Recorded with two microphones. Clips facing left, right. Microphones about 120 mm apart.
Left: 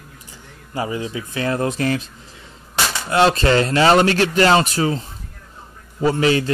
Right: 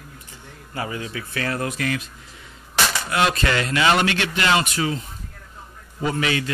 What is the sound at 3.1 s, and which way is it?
Speech, 30° left (ahead or behind).